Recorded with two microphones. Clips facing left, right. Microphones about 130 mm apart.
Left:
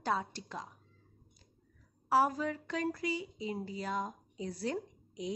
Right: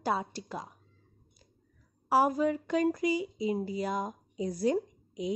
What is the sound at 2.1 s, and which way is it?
Speech, 10° right (ahead or behind).